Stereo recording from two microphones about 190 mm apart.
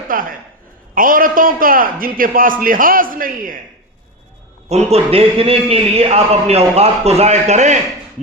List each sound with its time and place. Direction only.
0.1 s a man's voice: 45° right (ahead or behind)
4.7 s a man's voice: 35° right (ahead or behind)